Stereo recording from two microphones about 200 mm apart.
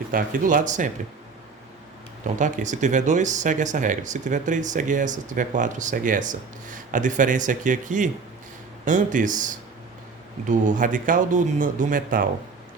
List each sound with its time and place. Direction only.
0.1 s speech: 45° right (ahead or behind)
2.2 s speech: 40° right (ahead or behind)